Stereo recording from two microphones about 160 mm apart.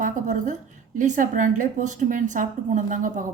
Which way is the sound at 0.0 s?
50° right (ahead or behind).